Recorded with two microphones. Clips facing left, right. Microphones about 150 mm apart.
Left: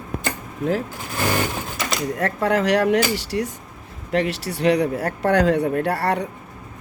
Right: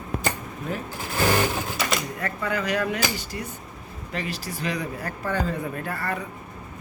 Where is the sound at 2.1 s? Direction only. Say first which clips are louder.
Left 8 dB; 80° left.